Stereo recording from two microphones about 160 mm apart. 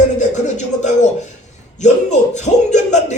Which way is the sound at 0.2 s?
50° left (ahead or behind).